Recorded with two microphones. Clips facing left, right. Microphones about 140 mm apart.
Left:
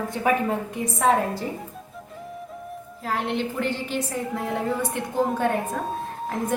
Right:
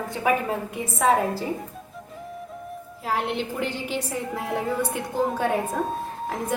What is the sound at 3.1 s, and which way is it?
A woman's voice, 10° right (ahead or behind).